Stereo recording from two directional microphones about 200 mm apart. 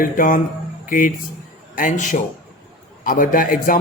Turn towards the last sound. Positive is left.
turn(degrees=45)  # may be behind; listen again after turning